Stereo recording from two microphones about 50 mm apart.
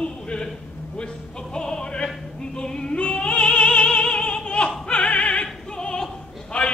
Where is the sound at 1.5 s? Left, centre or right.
Centre.